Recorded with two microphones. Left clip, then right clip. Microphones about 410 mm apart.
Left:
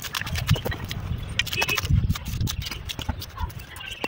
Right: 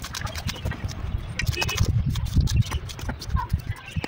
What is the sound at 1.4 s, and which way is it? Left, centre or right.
Horse, centre.